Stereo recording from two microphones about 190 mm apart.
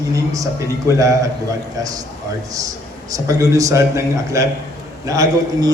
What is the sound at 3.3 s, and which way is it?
A man's voice, 15° right (ahead or behind).